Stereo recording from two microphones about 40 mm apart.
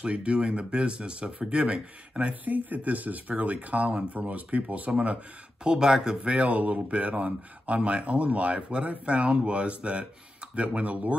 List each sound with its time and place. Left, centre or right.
0.0 s speech: right
2.4 s speech: right
5.0 s speech: right
6.2 s speech: right